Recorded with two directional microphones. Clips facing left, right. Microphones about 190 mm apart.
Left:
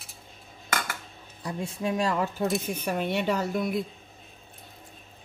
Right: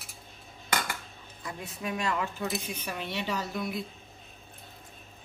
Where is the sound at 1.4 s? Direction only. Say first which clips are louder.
Left 6 dB; 30° left (ahead or behind); by 3.7 s 55° left (ahead or behind).